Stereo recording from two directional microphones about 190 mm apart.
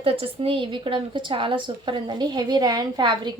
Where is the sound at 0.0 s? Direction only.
30° right (ahead or behind).